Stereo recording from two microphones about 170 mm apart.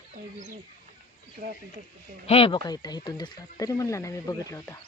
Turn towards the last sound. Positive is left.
turn(degrees=20)  # may be behind; listen again after turning